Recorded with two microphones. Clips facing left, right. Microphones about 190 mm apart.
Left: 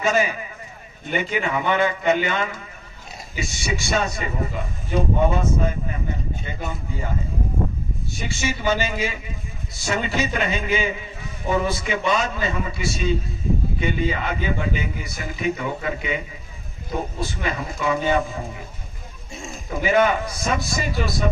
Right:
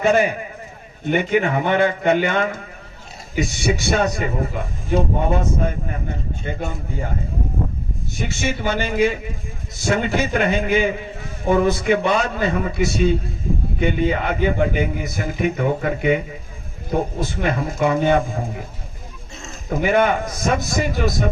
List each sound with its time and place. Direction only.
0.0 s a man's voice: 55° right (ahead or behind)
8.2 s a man's voice: 55° right (ahead or behind)
19.7 s a man's voice: 55° right (ahead or behind)